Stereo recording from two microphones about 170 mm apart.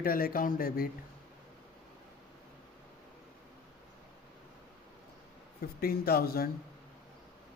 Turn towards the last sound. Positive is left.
turn(degrees=65)  # may be behind; listen again after turning